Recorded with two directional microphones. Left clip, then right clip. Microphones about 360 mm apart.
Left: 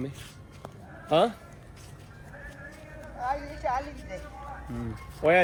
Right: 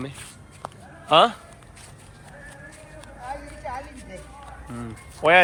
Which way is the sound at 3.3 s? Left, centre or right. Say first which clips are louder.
Left 4 dB; left.